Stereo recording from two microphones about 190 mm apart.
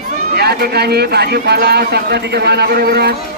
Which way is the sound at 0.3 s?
55° right (ahead or behind).